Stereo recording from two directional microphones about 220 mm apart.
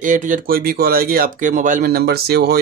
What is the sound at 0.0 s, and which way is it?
Speech, 35° right (ahead or behind).